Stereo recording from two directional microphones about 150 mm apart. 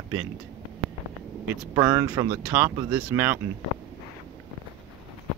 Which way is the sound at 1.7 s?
20° right (ahead or behind).